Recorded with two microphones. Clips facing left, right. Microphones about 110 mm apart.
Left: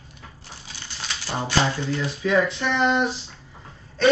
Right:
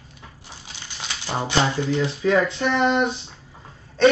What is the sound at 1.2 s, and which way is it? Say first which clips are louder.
Speech: right 1 dB; 20° right (ahead or behind).